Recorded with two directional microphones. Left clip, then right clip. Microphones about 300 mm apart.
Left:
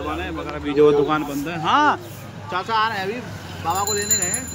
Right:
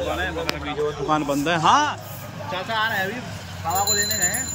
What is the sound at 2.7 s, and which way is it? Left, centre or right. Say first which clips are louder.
Speech: left 3 dB; left.